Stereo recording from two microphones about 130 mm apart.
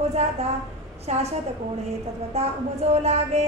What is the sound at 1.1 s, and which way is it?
Speech, 60° right (ahead or behind).